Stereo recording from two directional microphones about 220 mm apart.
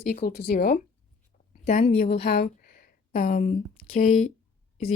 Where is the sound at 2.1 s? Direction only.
45° left (ahead or behind).